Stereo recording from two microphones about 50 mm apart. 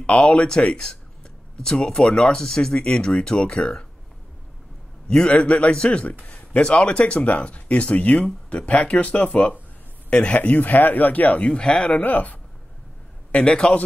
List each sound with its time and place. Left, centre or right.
0.0 s speech: left
5.0 s speech: centre
6.2 s a sound: left
6.6 s speech: centre
12.0 s speech: left
13.3 s speech: left